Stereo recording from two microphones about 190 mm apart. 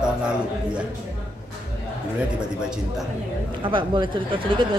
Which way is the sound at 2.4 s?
5° right (ahead or behind).